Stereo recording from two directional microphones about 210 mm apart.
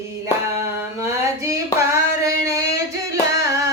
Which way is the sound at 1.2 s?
15° right (ahead or behind).